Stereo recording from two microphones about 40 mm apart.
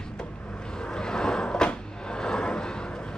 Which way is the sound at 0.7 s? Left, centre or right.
Centre.